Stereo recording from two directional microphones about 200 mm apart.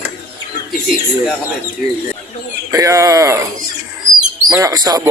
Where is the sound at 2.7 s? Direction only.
15° right (ahead or behind).